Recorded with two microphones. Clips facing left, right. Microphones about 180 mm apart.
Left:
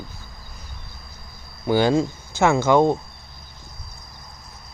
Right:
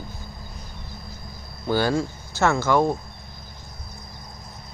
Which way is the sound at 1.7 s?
15° left (ahead or behind).